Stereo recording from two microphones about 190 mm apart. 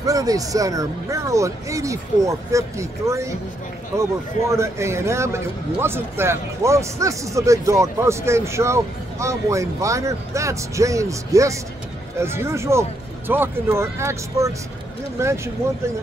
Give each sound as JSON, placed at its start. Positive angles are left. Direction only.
{"t": 0.0, "sound": "a man's voice", "side_deg": -20}